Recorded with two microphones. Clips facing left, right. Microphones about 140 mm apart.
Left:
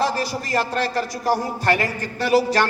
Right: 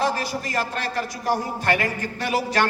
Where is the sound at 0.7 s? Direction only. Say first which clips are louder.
Left 4 dB; 35° left (ahead or behind).